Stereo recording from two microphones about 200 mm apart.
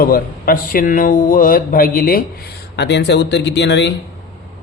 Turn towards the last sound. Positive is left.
turn(degrees=60)  # may be behind; listen again after turning